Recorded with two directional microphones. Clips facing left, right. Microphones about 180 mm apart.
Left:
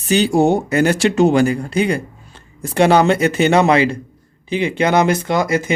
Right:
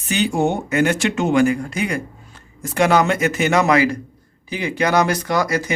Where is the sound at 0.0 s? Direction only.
35° left (ahead or behind).